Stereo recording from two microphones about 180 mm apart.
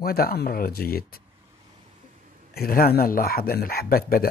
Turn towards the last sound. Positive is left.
turn(degrees=55)  # may be behind; listen again after turning